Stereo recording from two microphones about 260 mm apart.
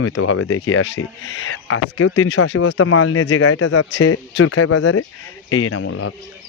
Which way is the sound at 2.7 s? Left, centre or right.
Left.